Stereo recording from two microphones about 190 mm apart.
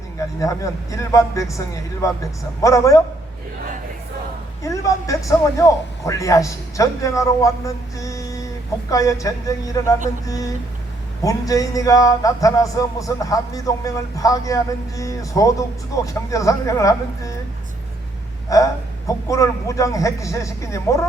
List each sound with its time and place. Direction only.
0.3 s a man's voice: 15° left (ahead or behind)
4.6 s a man's voice: 15° left (ahead or behind)
18.5 s a man's voice: 20° left (ahead or behind)